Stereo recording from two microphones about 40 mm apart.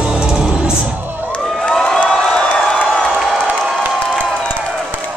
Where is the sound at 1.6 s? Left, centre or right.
Centre.